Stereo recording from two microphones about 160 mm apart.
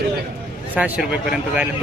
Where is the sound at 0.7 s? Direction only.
10° right (ahead or behind).